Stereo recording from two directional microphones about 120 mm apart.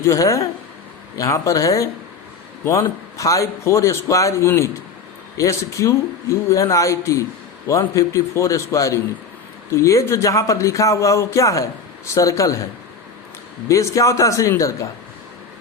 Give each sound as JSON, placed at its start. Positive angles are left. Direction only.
{"t": 0.0, "sound": "speech", "side_deg": 25}
{"t": 13.7, "sound": "speech", "side_deg": 25}